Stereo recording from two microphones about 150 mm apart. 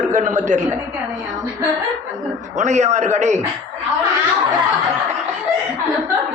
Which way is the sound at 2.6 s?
50° right (ahead or behind).